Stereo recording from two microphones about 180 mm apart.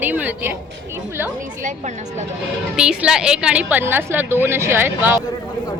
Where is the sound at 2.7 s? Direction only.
5° right (ahead or behind).